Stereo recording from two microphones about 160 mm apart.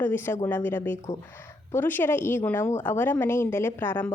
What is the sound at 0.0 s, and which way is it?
A woman's voice, 10° left (ahead or behind).